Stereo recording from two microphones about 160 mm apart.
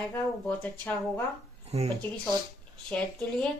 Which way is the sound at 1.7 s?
40° right (ahead or behind).